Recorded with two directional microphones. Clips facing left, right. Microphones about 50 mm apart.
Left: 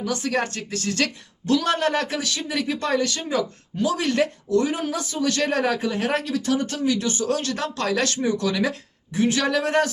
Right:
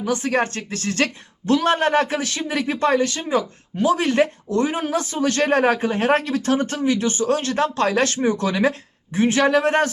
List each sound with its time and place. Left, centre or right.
0.0 s speech: right